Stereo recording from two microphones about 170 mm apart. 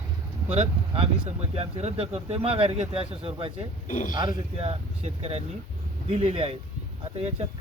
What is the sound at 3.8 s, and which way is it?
Speech, 50° left (ahead or behind).